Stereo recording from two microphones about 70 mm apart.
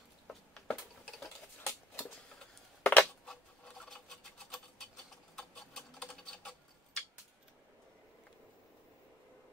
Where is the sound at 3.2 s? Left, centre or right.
Centre.